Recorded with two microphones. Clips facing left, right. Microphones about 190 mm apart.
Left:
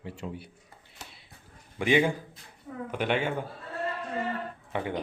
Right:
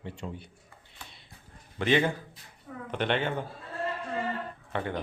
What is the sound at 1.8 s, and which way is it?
Speech, 10° left (ahead or behind).